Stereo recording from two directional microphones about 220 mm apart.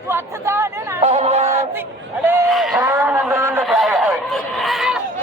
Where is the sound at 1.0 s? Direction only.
30° right (ahead or behind).